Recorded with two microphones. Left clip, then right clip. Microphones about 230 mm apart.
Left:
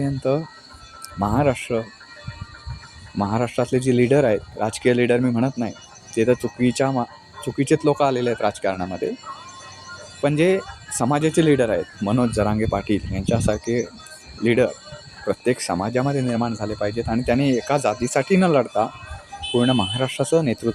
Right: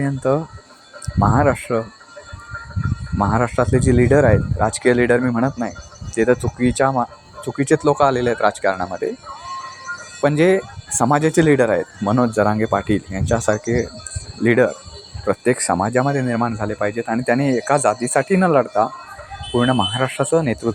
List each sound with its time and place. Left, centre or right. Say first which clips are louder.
0.0 s speech: right 3 dB; centre
3.2 s speech: right 4 dB; centre
10.2 s speech: right 3 dB; centre